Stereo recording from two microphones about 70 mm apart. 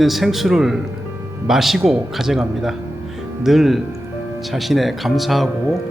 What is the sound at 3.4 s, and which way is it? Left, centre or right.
Speech, centre.